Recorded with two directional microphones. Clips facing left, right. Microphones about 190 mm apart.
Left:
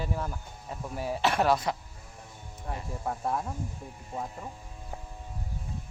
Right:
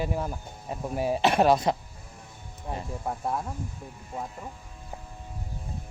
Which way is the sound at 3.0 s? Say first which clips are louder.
Even; 5° right (ahead or behind).